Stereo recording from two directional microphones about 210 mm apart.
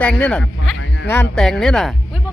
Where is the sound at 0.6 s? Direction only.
65° left (ahead or behind).